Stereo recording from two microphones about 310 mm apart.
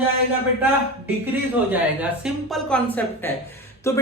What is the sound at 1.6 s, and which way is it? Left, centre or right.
A woman's voice, centre.